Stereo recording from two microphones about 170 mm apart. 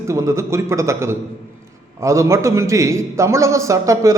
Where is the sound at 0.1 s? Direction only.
15° right (ahead or behind).